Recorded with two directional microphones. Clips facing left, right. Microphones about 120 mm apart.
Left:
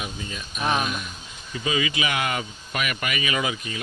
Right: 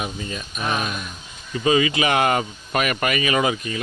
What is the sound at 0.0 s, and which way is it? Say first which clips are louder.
Speech: right 5 dB; 50° right (ahead or behind).